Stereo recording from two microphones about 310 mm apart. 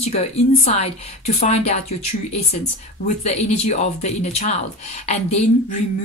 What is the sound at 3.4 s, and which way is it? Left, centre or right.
Speech, left.